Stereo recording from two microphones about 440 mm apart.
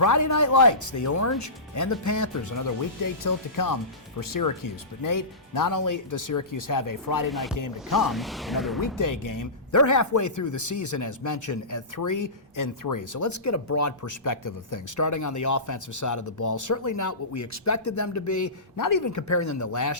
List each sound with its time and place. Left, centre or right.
0.0 s speech: left
7.3 s speech: centre
7.5 s speech: left
8.0 s speech: centre
9.0 s speech: left